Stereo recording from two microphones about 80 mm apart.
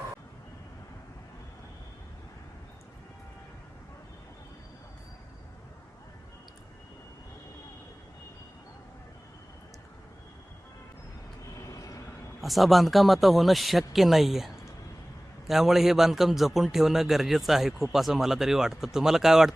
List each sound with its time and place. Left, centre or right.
11.5 s vehicle: left
12.4 s a man's voice: centre